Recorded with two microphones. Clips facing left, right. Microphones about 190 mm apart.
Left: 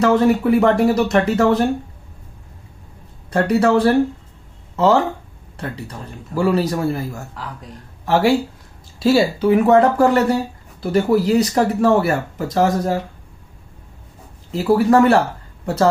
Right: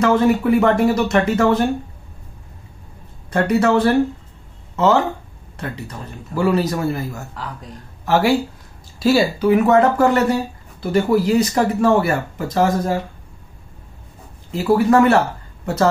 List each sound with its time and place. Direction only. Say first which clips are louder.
0.0 s speech: left 1 dB; 35° left (ahead or behind)
3.3 s speech: left 1 dB; 35° left (ahead or behind)
5.6 s speech: even; 35° left (ahead or behind)
14.5 s speech: even; 35° left (ahead or behind)